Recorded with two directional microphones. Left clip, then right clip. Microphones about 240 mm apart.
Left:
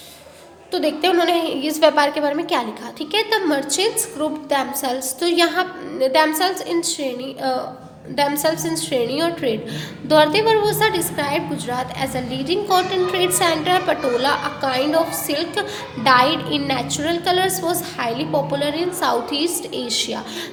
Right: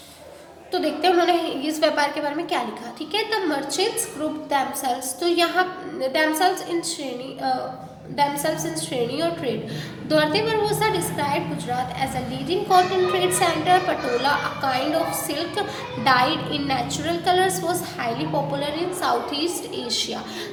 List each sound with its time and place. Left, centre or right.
0.7 s a woman's voice: left
8.1 s a woman's voice: left